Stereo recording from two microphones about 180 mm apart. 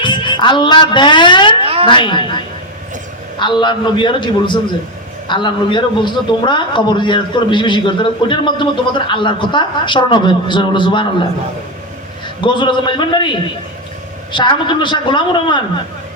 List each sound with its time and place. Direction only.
0.0 s a woman's voice: 25° left (ahead or behind)
1.6 s a sound: 30° right (ahead or behind)
1.9 s a man's voice: 25° left (ahead or behind)
12.4 s a man's voice: 25° left (ahead or behind)
14.3 s a man's voice: 25° left (ahead or behind)